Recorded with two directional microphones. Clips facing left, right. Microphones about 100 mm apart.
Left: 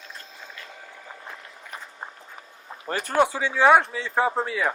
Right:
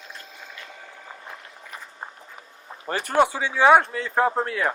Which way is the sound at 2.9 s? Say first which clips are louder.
Right 1 dB; 15° right (ahead or behind).